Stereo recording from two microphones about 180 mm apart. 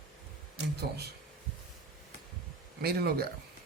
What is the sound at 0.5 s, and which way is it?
Speech, 65° right (ahead or behind).